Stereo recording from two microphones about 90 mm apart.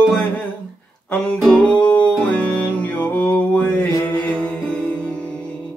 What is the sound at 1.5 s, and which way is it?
Music, 10° left (ahead or behind).